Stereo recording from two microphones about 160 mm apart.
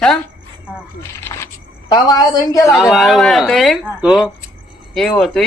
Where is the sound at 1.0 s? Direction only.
15° left (ahead or behind).